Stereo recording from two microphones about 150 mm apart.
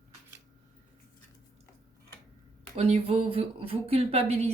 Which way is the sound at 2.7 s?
40° right (ahead or behind).